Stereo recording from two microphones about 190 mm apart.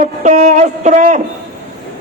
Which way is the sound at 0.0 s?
40° right (ahead or behind).